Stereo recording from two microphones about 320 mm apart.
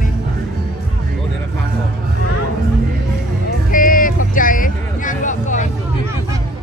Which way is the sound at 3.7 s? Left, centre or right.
Left.